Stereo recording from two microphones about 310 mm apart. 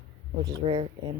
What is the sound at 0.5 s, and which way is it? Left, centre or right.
Speech, centre.